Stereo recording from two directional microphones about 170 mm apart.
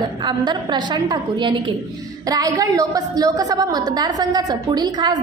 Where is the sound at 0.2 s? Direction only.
25° right (ahead or behind).